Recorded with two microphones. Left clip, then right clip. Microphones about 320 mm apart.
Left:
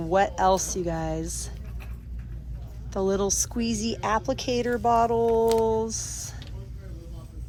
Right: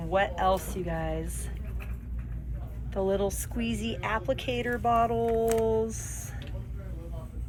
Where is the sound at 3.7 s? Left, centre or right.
Left.